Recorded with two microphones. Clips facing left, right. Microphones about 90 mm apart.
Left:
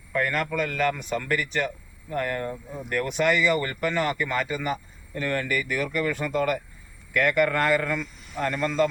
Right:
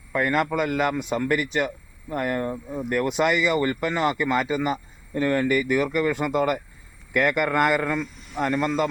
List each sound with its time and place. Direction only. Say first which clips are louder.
0.1 s speech: right 3 dB; 20° right (ahead or behind)